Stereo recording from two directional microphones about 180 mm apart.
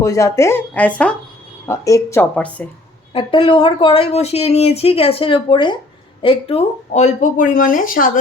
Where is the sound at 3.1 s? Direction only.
30° left (ahead or behind).